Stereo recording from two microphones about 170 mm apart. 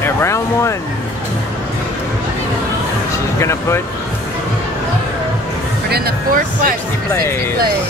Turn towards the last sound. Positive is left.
turn(degrees=-55)  # may be behind; listen again after turning